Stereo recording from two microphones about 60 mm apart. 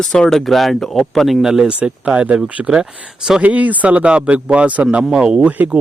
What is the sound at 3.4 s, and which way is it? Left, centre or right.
Speech, right.